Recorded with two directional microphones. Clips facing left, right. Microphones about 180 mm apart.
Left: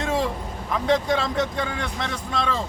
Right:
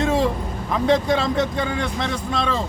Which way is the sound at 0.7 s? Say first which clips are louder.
Right 3 dB; 30° right (ahead or behind).